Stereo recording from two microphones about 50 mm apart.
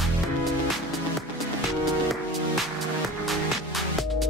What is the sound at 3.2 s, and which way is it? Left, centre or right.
Music, centre.